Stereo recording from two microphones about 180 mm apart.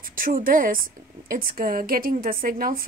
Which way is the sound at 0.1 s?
50° right (ahead or behind).